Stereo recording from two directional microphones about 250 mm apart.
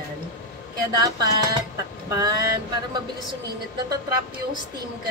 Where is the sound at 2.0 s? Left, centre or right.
Centre.